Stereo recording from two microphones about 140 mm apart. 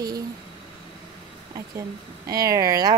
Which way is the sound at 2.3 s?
25° right (ahead or behind).